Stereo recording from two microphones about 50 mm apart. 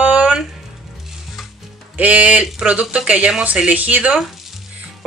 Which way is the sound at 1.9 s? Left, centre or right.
Right.